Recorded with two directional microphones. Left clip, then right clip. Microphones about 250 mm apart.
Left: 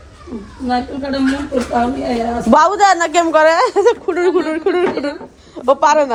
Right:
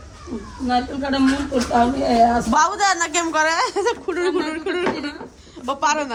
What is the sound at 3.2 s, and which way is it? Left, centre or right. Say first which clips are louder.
Speech: left 9 dB; centre.